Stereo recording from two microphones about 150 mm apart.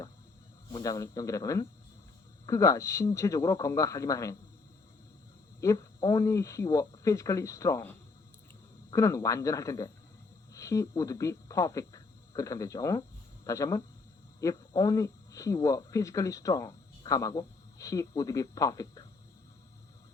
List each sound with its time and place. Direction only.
0.7 s speech: 25° left (ahead or behind)
5.5 s speech: 25° left (ahead or behind)